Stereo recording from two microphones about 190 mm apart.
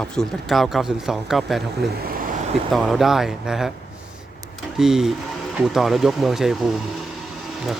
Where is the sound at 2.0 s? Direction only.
50° right (ahead or behind).